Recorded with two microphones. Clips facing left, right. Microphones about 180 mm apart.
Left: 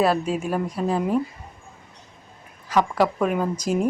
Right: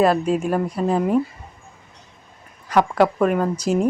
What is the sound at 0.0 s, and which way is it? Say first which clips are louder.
Speech: right 4 dB; 5° left (ahead or behind).